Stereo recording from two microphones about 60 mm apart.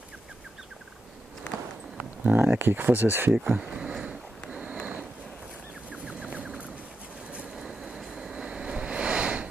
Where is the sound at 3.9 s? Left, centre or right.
Centre.